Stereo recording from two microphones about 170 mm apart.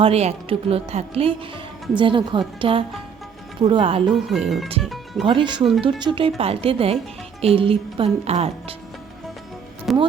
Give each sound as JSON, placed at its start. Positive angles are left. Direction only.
{"t": 0.0, "sound": "a woman's voice", "side_deg": -40}
{"t": 4.1, "sound": "speech", "side_deg": 0}
{"t": 5.2, "sound": "a woman's voice", "side_deg": -30}
{"t": 9.9, "sound": "speech", "side_deg": 0}